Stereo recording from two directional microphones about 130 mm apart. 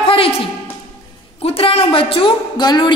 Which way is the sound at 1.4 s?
50° left (ahead or behind).